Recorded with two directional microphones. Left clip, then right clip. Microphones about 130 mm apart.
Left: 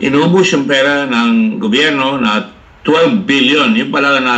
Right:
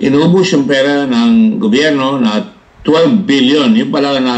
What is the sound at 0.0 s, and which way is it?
A man's voice, 40° right (ahead or behind).